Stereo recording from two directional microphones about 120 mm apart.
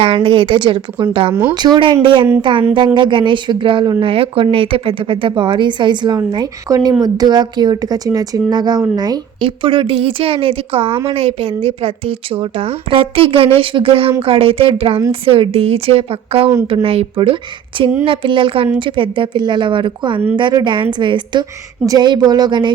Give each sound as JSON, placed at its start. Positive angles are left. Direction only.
{"t": 0.0, "sound": "a woman's voice", "side_deg": -50}
{"t": 1.3, "sound": "speech", "side_deg": -15}
{"t": 1.5, "sound": "a woman's voice", "side_deg": -40}
{"t": 9.4, "sound": "a woman's voice", "side_deg": -45}